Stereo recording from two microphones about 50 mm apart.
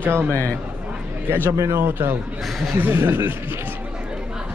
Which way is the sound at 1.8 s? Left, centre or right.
Right.